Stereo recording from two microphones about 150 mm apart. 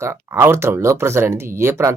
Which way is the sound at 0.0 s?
15° right (ahead or behind).